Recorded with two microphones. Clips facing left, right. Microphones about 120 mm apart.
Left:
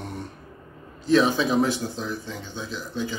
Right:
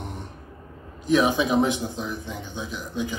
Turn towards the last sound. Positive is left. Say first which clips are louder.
# even
turn(degrees=-15)  # may be behind; listen again after turning